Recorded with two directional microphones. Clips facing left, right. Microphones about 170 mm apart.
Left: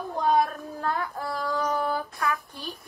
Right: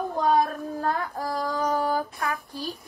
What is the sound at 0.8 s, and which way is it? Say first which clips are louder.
Speech: right 1 dB; 35° right (ahead or behind).